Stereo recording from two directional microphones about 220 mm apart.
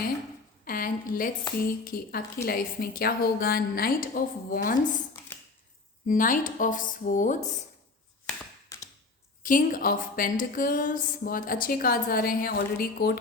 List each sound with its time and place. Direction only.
0.6 s a woman's voice: 40° left (ahead or behind)
6.1 s speech: 35° left (ahead or behind)
9.4 s speech: 35° left (ahead or behind)